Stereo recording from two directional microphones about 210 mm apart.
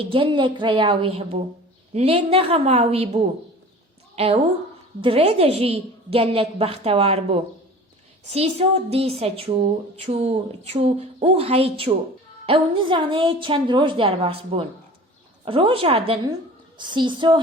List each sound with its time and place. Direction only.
0.0 s a woman's voice: 25° right (ahead or behind)